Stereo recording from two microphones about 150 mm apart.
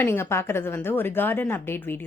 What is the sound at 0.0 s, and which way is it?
A woman's voice, 15° left (ahead or behind).